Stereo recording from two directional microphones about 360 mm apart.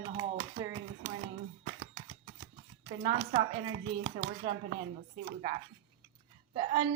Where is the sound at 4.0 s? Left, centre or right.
Right.